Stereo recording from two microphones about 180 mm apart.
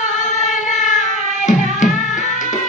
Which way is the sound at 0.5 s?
45° left (ahead or behind).